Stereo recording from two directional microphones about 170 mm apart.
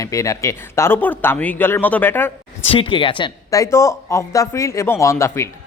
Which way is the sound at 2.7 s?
30° left (ahead or behind).